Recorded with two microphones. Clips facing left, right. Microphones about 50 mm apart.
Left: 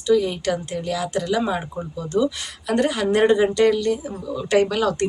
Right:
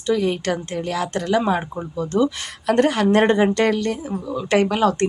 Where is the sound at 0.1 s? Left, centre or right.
Right.